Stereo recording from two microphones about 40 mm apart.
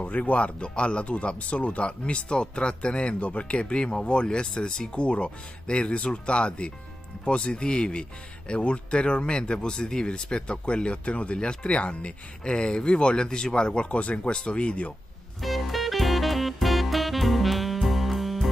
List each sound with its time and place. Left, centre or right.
0.0 s speech: left
15.4 s music: centre